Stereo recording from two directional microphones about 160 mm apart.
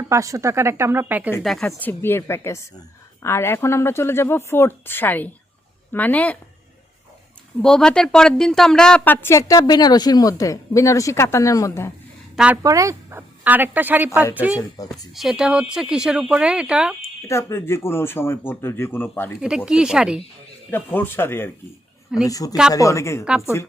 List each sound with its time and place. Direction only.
0.1 s speech: 20° right (ahead or behind)
1.4 s a woman's voice: centre (ahead or behind)
7.6 s a woman's voice: 5° left (ahead or behind)
12.6 s speech: 20° right (ahead or behind)
17.2 s a woman's voice: 15° left (ahead or behind)
19.4 s speech: 5° right (ahead or behind)
20.7 s a woman's voice: 10° left (ahead or behind)